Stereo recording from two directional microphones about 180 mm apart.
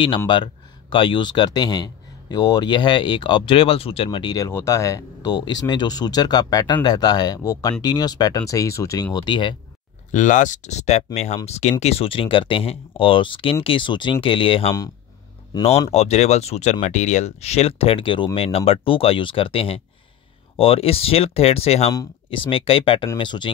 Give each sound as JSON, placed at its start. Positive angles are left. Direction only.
{"t": 0.3, "sound": "speech", "side_deg": 25}
{"t": 10.1, "sound": "speech", "side_deg": 45}
{"t": 15.9, "sound": "speech", "side_deg": 35}